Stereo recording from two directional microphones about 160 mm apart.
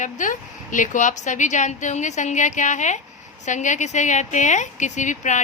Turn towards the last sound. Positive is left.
turn(degrees=50)  # may be behind; listen again after turning